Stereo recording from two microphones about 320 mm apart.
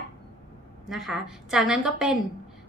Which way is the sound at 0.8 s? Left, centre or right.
Centre.